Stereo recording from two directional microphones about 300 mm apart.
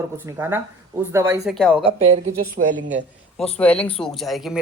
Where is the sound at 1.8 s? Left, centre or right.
Centre.